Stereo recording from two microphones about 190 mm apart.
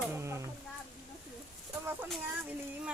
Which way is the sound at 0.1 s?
15° right (ahead or behind).